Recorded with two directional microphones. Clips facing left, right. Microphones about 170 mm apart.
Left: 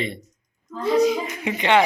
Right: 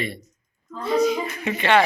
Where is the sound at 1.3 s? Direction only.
20° left (ahead or behind).